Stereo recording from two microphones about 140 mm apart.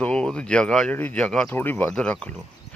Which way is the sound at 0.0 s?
5° left (ahead or behind).